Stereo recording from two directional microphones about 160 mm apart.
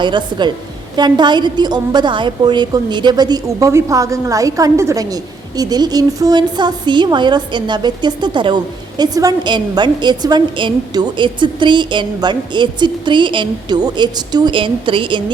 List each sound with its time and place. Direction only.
0.0 s a woman's voice: 30° right (ahead or behind)